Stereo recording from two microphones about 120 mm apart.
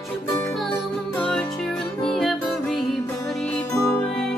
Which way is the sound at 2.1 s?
Centre (ahead or behind).